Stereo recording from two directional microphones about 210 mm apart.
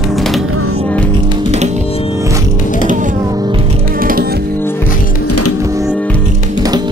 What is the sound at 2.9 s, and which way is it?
Music, 40° right (ahead or behind).